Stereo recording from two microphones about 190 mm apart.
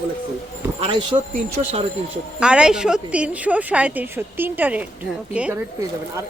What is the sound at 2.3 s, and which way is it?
Speech, 5° right (ahead or behind).